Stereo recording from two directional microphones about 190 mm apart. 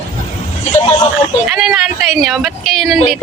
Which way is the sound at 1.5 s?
5° right (ahead or behind).